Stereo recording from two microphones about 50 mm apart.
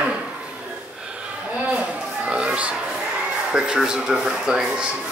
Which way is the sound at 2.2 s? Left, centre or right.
Right.